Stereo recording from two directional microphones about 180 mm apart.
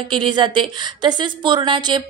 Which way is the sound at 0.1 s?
25° right (ahead or behind).